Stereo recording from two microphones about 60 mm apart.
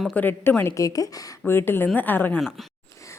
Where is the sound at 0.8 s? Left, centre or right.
Left.